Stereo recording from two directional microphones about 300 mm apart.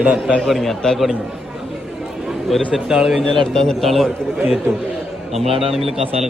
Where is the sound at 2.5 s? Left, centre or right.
Centre.